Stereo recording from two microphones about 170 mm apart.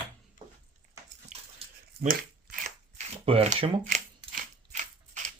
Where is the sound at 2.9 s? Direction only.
35° right (ahead or behind).